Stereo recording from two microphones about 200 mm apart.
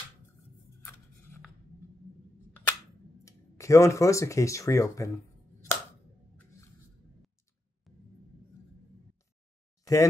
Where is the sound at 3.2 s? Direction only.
15° left (ahead or behind).